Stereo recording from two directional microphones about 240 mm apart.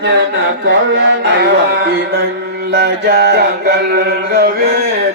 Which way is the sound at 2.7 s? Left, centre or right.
Right.